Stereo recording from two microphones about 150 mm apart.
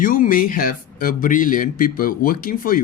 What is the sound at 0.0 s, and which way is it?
Speech, 65° left (ahead or behind).